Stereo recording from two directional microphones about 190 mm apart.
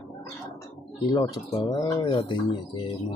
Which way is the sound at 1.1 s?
20° left (ahead or behind).